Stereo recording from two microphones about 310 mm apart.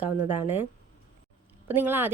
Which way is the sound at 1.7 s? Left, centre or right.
Centre.